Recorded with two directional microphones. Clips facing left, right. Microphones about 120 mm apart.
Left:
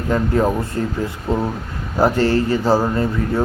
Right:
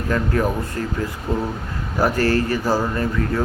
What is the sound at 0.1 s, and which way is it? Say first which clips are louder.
Speech: left 4 dB; 20° left (ahead or behind).